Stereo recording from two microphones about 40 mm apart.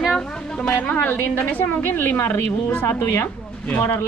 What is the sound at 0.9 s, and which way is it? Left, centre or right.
Speech, left.